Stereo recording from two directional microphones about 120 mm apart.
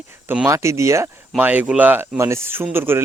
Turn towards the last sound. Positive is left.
turn(degrees=-20)  # may be behind; listen again after turning